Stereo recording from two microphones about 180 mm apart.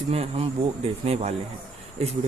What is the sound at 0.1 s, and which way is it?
Speech, 35° right (ahead or behind).